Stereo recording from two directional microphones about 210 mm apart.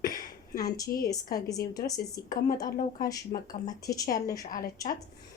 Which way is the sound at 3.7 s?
15° left (ahead or behind).